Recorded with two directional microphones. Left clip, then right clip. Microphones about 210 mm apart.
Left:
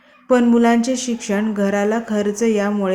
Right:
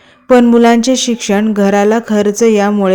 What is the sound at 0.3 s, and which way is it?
Speech, 40° right (ahead or behind).